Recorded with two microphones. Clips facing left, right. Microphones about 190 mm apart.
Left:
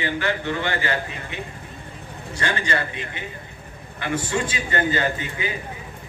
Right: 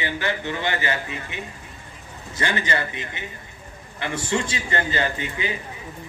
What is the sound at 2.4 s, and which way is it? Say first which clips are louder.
A man's voice: even; 20° right (ahead or behind).